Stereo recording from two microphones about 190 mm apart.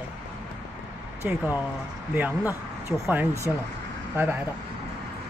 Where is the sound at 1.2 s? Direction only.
10° right (ahead or behind).